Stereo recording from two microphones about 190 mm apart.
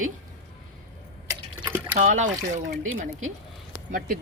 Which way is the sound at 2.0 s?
40° right (ahead or behind).